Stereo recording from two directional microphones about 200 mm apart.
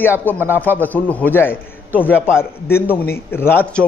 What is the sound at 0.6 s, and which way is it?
A man's voice, 10° left (ahead or behind).